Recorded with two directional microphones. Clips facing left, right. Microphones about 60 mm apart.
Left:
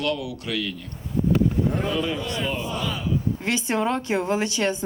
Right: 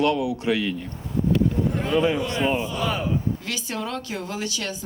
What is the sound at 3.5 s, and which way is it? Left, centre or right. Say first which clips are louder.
Speech: left 6 dB; left.